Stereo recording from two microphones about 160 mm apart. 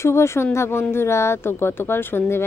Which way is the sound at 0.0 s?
15° left (ahead or behind).